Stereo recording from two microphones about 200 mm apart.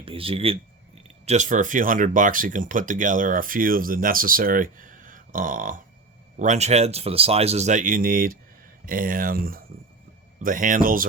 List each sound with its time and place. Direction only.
0.0 s speech: 25° right (ahead or behind); by 11.0 s 45° right (ahead or behind)